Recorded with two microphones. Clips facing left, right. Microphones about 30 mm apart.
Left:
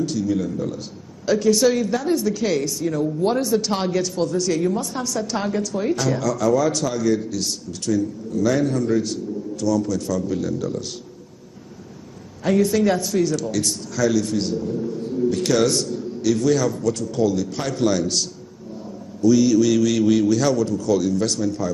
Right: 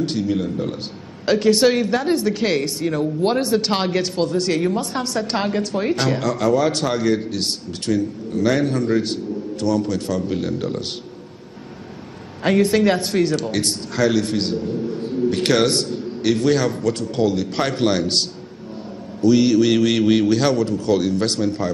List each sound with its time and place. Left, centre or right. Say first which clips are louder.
0.0 s speech: right 1 dB; right
12.4 s speech: right 2 dB; right